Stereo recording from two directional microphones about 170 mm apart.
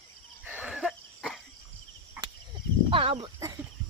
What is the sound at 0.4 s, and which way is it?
Cough, 10° right (ahead or behind).